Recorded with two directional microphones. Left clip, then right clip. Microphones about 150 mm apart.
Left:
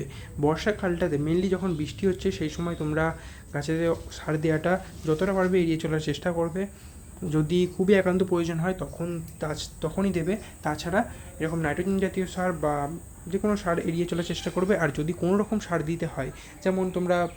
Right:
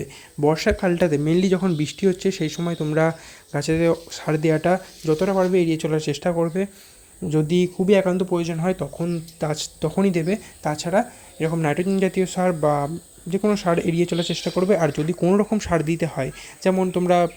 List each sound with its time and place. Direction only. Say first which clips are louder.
0.0 s speech: right 5 dB; 30° right (ahead or behind)
7.3 s speech: right 5 dB; 20° right (ahead or behind)
8.6 s speech: right 6 dB; 30° right (ahead or behind)
9.4 s speech: right 6 dB; 40° right (ahead or behind)